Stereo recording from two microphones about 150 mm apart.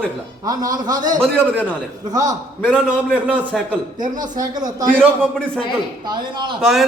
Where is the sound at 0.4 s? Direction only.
25° right (ahead or behind).